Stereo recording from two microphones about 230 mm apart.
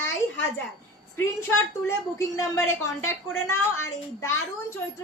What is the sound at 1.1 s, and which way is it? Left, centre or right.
A woman's voice, centre.